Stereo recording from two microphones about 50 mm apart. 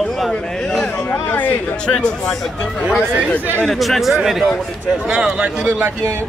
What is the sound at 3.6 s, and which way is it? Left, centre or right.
Speech, centre.